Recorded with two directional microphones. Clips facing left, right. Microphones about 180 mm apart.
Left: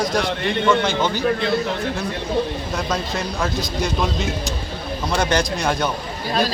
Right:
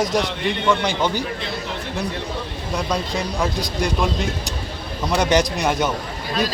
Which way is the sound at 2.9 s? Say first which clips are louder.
Right 2 dB; 15° right (ahead or behind).